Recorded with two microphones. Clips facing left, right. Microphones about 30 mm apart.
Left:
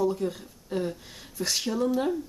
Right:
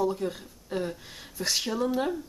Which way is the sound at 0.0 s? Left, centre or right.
Centre.